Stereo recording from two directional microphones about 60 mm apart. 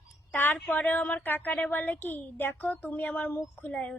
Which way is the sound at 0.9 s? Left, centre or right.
Left.